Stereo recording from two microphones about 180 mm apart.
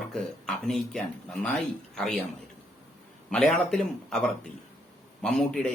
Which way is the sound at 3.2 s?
5° left (ahead or behind).